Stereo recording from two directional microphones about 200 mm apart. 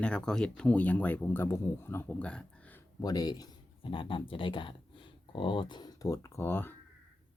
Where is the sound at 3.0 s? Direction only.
20° left (ahead or behind).